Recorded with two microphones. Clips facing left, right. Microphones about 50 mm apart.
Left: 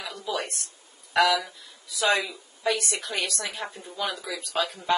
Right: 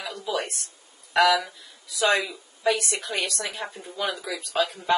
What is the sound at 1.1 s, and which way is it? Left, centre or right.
Speech, centre.